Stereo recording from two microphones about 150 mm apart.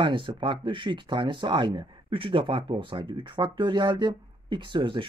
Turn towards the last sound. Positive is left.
turn(degrees=-30)  # may be behind; listen again after turning